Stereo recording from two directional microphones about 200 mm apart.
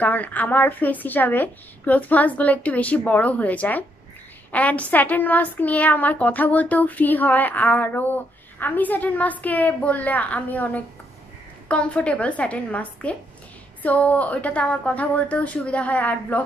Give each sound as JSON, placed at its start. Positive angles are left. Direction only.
{"t": 0.0, "sound": "speech", "side_deg": 10}